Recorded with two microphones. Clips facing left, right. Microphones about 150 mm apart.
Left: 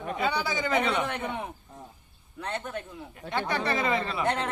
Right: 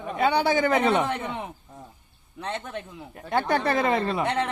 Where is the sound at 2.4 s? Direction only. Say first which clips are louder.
Right 1 dB; 20° right (ahead or behind).